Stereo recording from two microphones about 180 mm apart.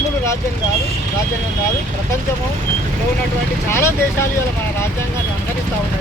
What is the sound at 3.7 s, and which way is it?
Speech, 15° left (ahead or behind).